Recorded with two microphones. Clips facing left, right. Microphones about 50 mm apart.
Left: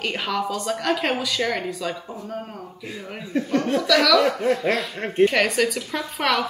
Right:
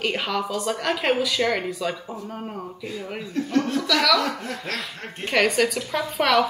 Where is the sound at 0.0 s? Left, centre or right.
Centre.